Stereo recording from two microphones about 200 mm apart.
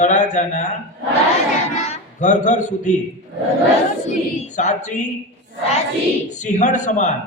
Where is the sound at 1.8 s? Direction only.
35° left (ahead or behind).